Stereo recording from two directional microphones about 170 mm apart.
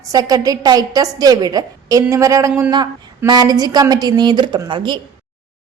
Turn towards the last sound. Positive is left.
turn(degrees=-25)  # may be behind; listen again after turning